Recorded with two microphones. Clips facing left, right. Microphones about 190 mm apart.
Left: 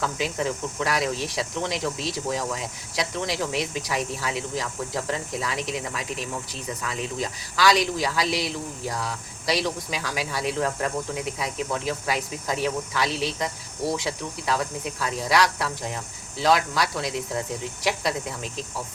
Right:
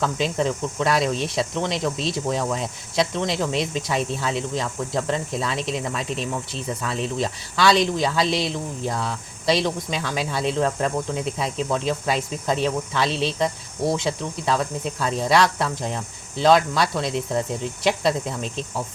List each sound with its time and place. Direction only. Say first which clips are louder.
0.0 s speech: right 4 dB; 25° right (ahead or behind)